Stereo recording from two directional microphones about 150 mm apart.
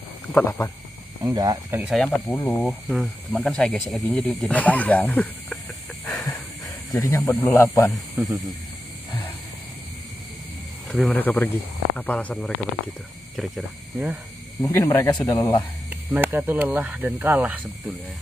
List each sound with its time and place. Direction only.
0.3 s speech: 15° left (ahead or behind)
1.2 s speech: 25° right (ahead or behind)
1.8 s speech: centre (ahead or behind)
2.3 s speech: 10° left (ahead or behind)
6.0 s hiss: centre (ahead or behind)
7.0 s speech: 20° left (ahead or behind)
10.9 s speech: 5° left (ahead or behind)
14.6 s speech: 15° left (ahead or behind)
15.9 s speech: 10° right (ahead or behind)